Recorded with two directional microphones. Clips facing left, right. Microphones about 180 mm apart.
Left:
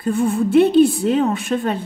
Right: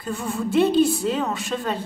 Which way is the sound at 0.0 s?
55° left (ahead or behind).